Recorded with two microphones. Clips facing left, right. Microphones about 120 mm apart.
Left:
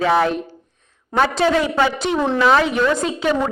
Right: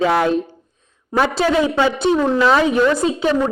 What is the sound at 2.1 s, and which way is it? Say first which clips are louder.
Speech: right 3 dB; 20° right (ahead or behind).